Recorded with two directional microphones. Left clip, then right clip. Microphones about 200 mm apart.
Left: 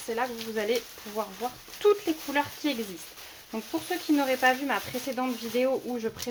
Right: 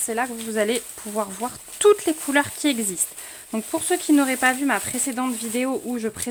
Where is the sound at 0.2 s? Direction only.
60° right (ahead or behind).